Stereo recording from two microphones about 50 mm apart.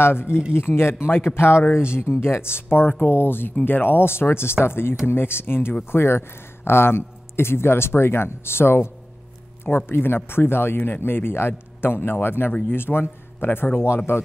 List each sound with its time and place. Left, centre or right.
0.0 s a man's voice: left